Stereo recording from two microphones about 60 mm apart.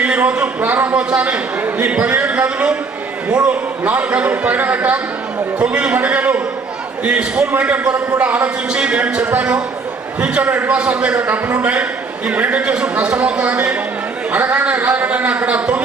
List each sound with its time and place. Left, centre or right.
0.0 s a man's voice: right